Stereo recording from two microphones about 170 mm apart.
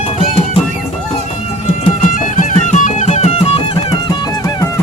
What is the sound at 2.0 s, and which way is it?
Music, 50° left (ahead or behind).